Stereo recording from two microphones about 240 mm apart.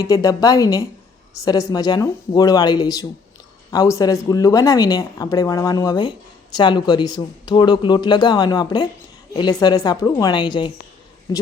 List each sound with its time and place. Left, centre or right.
0.0 s a woman's voice: centre